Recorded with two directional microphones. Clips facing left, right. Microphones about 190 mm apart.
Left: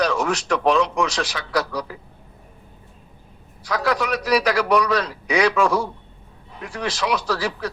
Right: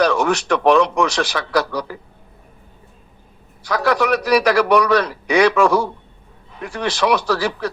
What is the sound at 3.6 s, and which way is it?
A man's voice, 65° right (ahead or behind).